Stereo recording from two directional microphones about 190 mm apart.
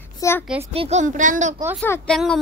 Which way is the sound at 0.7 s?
35° right (ahead or behind).